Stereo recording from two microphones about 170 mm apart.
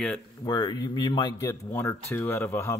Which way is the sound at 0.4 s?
20° left (ahead or behind).